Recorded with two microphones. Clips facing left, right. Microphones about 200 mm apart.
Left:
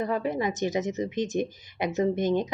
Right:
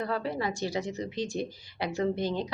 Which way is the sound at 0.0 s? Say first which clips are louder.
Left 4 dB; 20° left (ahead or behind).